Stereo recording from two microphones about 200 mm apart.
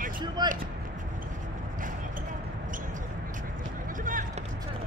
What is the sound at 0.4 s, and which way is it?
Speech, 20° right (ahead or behind).